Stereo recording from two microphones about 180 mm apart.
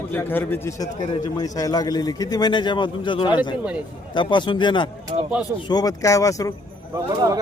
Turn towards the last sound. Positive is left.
turn(degrees=-20)  # may be behind; listen again after turning